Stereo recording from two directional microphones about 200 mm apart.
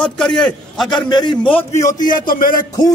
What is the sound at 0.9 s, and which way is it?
Speech, 20° left (ahead or behind).